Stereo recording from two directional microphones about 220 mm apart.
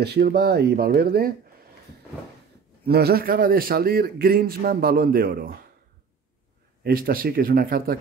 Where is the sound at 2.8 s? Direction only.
45° right (ahead or behind).